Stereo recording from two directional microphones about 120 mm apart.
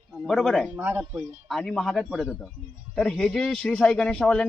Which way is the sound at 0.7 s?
15° right (ahead or behind).